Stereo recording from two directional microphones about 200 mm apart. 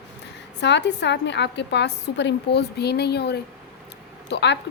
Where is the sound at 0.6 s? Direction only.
60° left (ahead or behind).